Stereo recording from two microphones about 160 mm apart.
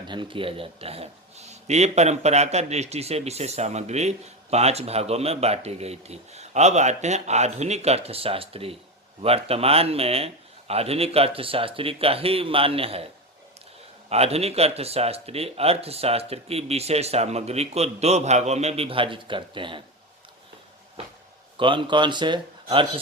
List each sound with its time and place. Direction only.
0.0 s speech: 30° right (ahead or behind)
14.1 s speech: 40° right (ahead or behind)
21.6 s speech: 30° right (ahead or behind)